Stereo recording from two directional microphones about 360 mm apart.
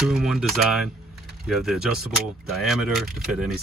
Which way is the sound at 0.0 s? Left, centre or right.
Centre.